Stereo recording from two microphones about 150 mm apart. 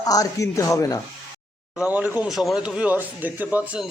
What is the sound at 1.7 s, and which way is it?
A man's voice, 10° right (ahead or behind).